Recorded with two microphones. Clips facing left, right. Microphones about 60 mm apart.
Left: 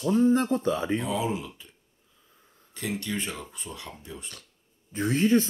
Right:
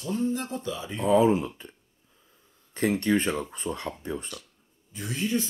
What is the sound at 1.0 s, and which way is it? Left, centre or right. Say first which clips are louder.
Speech: right 8 dB; right.